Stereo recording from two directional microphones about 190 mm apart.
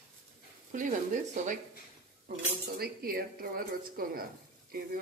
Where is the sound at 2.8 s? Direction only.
55° right (ahead or behind).